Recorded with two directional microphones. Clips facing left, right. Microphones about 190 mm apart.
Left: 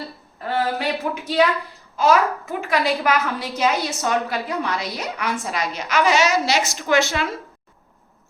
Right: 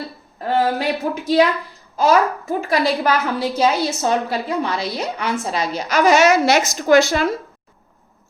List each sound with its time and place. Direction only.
0.3 s a sound: 40° right (ahead or behind)
2.0 s a woman's voice: 35° right (ahead or behind); by 6.6 s 55° right (ahead or behind)
6.7 s a woman's voice: 40° right (ahead or behind)